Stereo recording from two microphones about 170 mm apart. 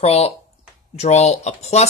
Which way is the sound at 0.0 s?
35° left (ahead or behind).